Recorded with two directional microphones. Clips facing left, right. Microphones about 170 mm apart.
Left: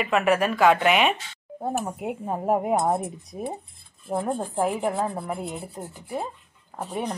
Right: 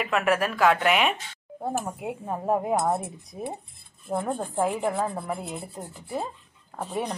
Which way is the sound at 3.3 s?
Centre (ahead or behind).